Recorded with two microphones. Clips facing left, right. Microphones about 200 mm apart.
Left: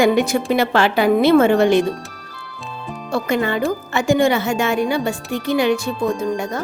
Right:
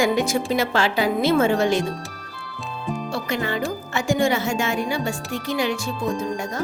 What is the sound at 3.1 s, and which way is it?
A woman's voice, 55° left (ahead or behind).